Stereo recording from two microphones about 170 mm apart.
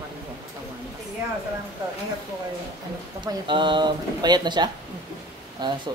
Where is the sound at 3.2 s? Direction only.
30° right (ahead or behind).